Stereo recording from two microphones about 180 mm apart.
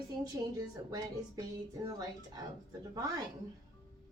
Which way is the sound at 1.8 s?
20° right (ahead or behind).